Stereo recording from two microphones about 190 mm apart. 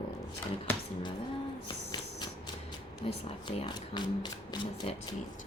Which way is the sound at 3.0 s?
30° left (ahead or behind).